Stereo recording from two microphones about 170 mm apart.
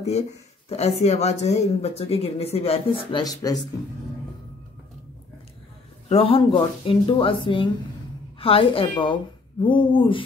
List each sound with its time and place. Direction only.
0.7 s speech: 40° left (ahead or behind)
6.0 s a woman's voice: 35° left (ahead or behind)